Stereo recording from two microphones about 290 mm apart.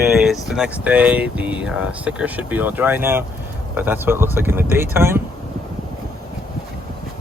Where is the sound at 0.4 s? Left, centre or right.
Centre.